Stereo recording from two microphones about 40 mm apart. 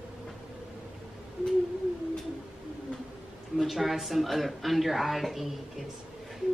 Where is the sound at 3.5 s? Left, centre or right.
Centre.